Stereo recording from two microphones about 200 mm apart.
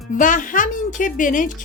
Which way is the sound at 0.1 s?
40° left (ahead or behind).